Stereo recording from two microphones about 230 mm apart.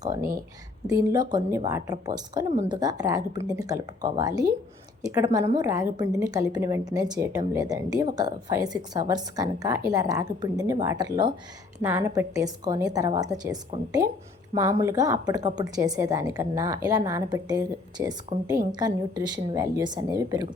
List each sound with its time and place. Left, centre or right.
0.9 s a woman's voice: centre